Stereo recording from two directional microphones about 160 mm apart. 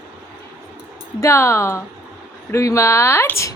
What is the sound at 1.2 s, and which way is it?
A woman's voice, 15° left (ahead or behind).